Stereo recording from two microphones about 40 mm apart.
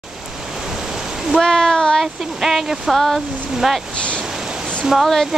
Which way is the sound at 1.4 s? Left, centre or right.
Centre.